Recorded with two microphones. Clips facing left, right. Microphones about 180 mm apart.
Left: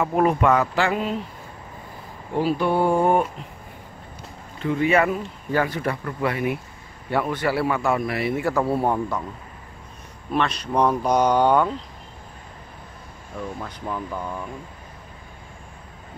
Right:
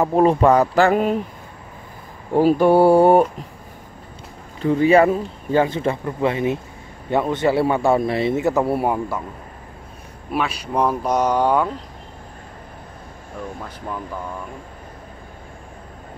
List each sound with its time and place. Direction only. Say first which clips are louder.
0.0 s speech: right 4 dB; 30° right (ahead or behind); by 1.2 s 50° right (ahead or behind)
2.3 s speech: right 7 dB; 45° right (ahead or behind)
4.6 s a man's voice: right 6 dB; 35° right (ahead or behind); by 9.2 s 10° right (ahead or behind)
10.3 s speech: even; 5° right (ahead or behind)